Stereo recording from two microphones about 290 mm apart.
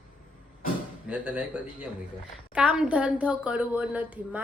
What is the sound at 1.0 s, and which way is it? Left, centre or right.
Speech, centre.